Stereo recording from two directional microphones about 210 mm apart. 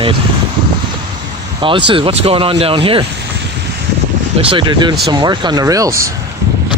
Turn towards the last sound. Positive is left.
turn(degrees=-15)  # may be behind; listen again after turning